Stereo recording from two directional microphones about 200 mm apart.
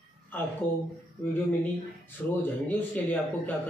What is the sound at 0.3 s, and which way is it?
Speech, 10° left (ahead or behind).